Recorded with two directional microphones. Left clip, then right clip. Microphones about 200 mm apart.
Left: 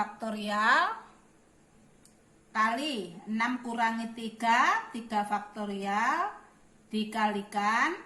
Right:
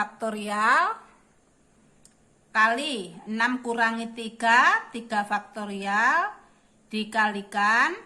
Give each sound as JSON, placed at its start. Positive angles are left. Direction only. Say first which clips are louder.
{"t": 0.2, "sound": "a woman's voice", "louder": "right 4 dB", "side_deg": -25}
{"t": 2.5, "sound": "a woman's voice", "louder": "right 6 dB", "side_deg": -30}